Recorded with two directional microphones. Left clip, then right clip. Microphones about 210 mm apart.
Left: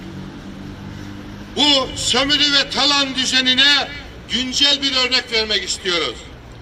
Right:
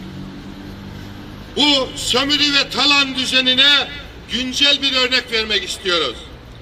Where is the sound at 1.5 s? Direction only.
20° left (ahead or behind).